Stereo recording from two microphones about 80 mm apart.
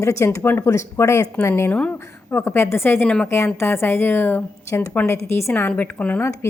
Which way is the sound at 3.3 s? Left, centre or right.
Left.